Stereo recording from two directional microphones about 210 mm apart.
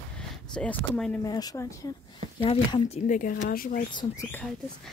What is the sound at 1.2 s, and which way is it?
Speech, 20° left (ahead or behind).